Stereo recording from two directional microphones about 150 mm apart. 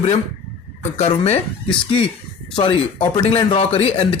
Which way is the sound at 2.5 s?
35° left (ahead or behind).